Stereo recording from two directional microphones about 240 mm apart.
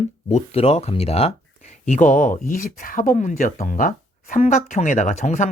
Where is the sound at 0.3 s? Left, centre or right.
Left.